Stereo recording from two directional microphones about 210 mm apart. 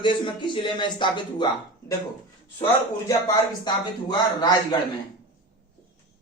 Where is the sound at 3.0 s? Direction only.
15° left (ahead or behind).